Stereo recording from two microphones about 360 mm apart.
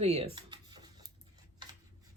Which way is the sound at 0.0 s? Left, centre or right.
Centre.